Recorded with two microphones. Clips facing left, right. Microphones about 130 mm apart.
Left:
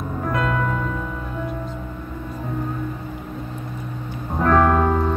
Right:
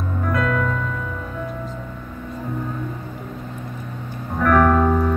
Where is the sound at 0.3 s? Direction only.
25° left (ahead or behind).